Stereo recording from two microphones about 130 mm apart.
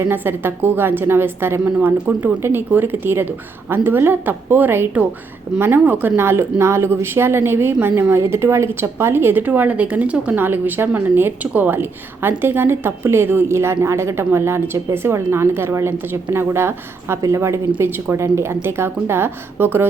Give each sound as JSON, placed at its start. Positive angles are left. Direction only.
{"t": 0.0, "sound": "a woman's voice", "side_deg": -15}